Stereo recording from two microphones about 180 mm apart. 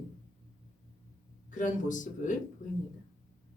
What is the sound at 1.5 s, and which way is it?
Speech, 45° left (ahead or behind).